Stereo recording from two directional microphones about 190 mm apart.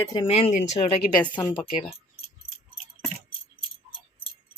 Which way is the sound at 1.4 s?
20° left (ahead or behind).